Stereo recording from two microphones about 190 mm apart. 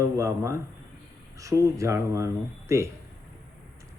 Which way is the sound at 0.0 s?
15° right (ahead or behind).